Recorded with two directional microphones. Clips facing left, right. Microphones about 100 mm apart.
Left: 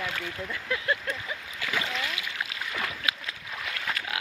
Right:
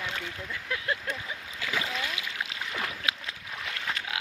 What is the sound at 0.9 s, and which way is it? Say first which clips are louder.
Vehicle: left 2 dB; 5° right (ahead or behind).